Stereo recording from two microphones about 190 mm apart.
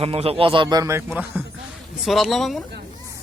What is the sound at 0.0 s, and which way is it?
A man's voice, 30° right (ahead or behind).